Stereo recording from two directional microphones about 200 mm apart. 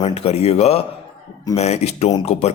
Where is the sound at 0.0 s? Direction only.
30° left (ahead or behind).